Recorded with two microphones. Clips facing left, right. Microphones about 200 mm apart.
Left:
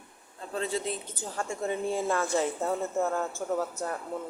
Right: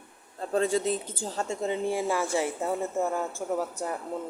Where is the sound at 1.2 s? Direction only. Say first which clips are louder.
Right 2 dB; 25° right (ahead or behind).